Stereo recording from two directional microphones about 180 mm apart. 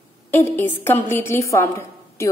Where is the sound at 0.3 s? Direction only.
10° left (ahead or behind).